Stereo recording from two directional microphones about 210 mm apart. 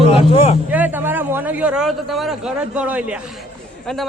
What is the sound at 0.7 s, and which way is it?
A man's voice, 10° right (ahead or behind).